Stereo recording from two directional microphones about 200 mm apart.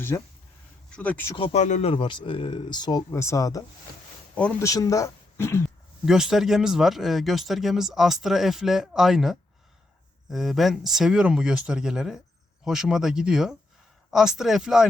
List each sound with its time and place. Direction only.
0.1 s speech: 15° left (ahead or behind)
1.4 s speech: 35° left (ahead or behind); by 3.6 s 15° left (ahead or behind)
4.4 s speech: 5° left (ahead or behind)
6.1 s speech: centre (ahead or behind)